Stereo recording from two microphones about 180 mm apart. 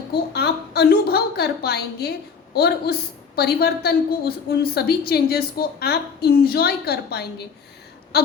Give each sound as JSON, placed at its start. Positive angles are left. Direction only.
{"t": 0.1, "sound": "a woman's voice", "side_deg": 65}